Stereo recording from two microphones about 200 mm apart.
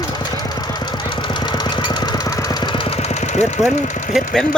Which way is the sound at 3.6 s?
35° left (ahead or behind).